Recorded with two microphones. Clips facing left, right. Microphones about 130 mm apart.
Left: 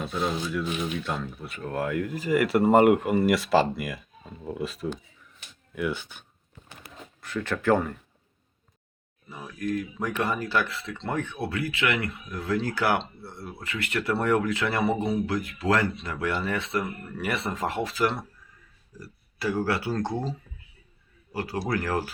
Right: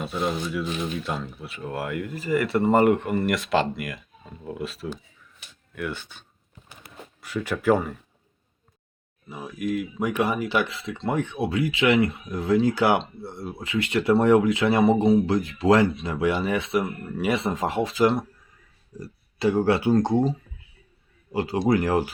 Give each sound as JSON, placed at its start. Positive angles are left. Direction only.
{"t": 0.0, "sound": "speech", "side_deg": -5}
{"t": 7.2, "sound": "speech", "side_deg": -10}
{"t": 9.3, "sound": "speech", "side_deg": -15}
{"t": 21.3, "sound": "speech", "side_deg": -20}